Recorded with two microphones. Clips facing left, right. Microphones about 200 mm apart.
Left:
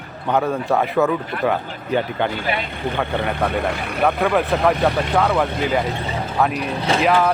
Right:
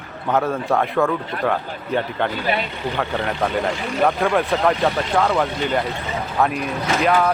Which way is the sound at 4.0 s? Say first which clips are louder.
Left 1 dB; centre (ahead or behind).